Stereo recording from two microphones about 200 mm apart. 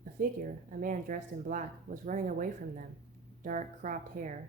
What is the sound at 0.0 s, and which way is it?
A woman's voice, 45° right (ahead or behind).